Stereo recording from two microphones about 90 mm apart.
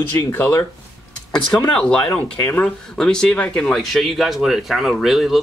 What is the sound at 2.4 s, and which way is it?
Speech, 25° left (ahead or behind).